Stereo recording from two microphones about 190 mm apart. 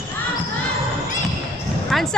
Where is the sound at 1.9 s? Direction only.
Centre (ahead or behind).